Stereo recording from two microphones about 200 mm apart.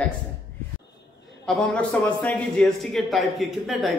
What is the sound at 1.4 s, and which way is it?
Speech, 5° left (ahead or behind).